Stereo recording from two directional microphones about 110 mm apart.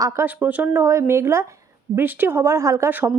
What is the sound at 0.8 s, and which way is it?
Speech, 25° right (ahead or behind).